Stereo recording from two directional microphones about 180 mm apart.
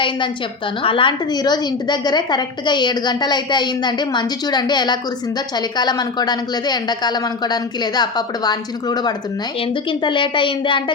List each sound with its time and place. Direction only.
0.8 s a woman's voice: 30° left (ahead or behind)